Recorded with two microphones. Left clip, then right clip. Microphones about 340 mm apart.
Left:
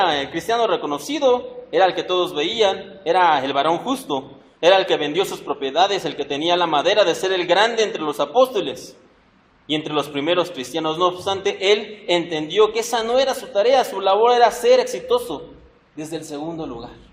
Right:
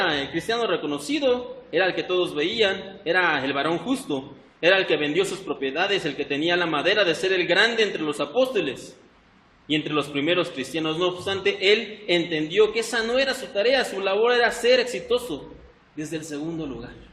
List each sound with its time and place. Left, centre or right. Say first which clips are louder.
0.0 s a man's voice: left 5 dB; centre